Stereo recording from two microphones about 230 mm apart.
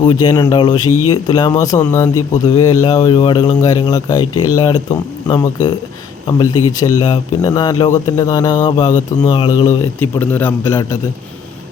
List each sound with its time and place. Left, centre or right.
0.0 s a man's voice: centre
0.9 s speech: left
1.1 s speech: centre
6.7 s speech: centre